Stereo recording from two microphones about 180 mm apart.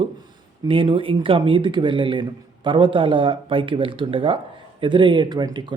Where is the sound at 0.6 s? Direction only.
30° right (ahead or behind).